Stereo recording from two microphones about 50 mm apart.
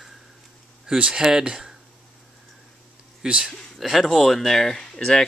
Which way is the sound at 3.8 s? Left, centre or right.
Centre.